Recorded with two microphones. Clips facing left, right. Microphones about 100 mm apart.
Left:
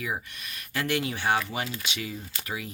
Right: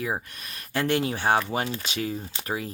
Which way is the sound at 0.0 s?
35° right (ahead or behind).